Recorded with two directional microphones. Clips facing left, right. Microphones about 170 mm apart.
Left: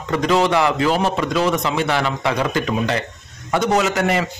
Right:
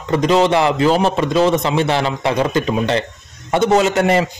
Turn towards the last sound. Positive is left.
turn(degrees=-30)  # may be behind; listen again after turning